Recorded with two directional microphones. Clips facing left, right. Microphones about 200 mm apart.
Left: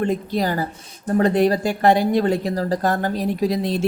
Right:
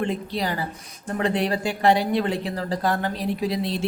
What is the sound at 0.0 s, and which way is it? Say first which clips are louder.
Speech: left 5 dB; 45° left (ahead or behind).